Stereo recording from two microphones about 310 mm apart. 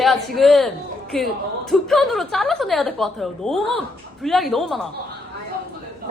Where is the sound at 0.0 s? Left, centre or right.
Centre.